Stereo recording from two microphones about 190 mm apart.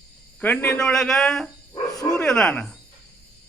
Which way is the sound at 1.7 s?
20° left (ahead or behind).